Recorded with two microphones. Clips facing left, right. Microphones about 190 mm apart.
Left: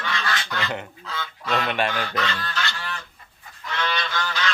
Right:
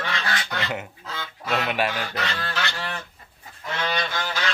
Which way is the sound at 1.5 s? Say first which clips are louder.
Even; 5° right (ahead or behind).